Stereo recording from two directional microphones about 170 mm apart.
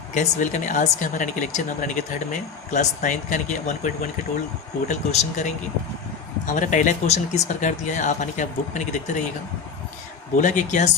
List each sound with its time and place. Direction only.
0.1 s speech: 45° left (ahead or behind)
10.3 s speech: 50° left (ahead or behind)